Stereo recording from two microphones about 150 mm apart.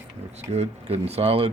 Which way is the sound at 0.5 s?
45° right (ahead or behind).